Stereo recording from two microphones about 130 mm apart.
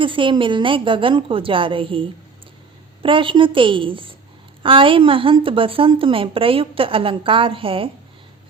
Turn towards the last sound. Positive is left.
turn(degrees=-45)  # may be behind; listen again after turning